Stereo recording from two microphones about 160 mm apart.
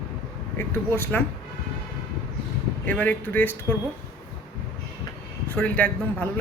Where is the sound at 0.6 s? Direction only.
15° left (ahead or behind).